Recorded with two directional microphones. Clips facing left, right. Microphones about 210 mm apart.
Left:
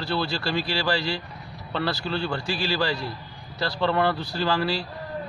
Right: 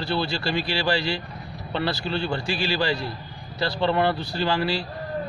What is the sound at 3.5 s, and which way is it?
A man's voice, 25° right (ahead or behind).